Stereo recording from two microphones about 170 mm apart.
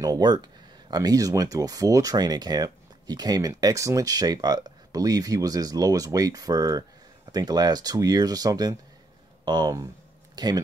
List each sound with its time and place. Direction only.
0.0 s speech: 25° right (ahead or behind)